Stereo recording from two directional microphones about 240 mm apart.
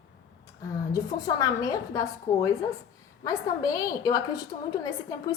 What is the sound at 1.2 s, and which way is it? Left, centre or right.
A woman's voice, centre.